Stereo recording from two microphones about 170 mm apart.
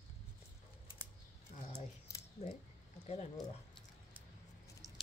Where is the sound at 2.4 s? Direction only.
40° left (ahead or behind).